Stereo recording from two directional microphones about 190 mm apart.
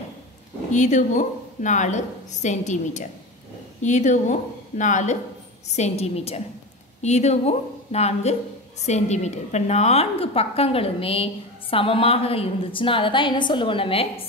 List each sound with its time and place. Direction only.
0.7 s a woman's voice: 40° left (ahead or behind)